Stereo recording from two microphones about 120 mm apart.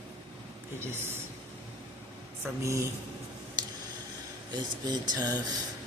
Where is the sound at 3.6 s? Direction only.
35° right (ahead or behind).